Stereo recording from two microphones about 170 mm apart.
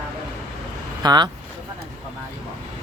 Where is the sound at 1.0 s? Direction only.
25° right (ahead or behind).